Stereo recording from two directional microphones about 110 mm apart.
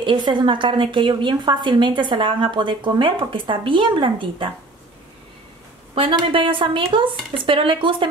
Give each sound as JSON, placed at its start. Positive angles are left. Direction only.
{"t": 0.0, "sound": "a woman's voice", "side_deg": -45}
{"t": 5.9, "sound": "a woman's voice", "side_deg": -50}